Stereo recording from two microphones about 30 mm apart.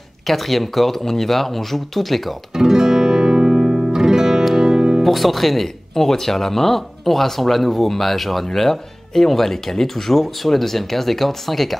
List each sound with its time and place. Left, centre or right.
0.3 s speech: centre
2.5 s music: centre
5.0 s speech: centre